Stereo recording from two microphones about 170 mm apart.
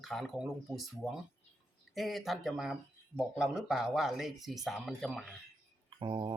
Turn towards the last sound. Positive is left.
turn(degrees=-30)  # may be behind; listen again after turning